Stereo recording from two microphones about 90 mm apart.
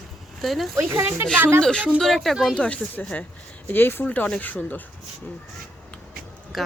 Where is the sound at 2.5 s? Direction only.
15° left (ahead or behind).